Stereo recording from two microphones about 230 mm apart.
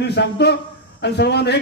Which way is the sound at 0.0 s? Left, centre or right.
Left.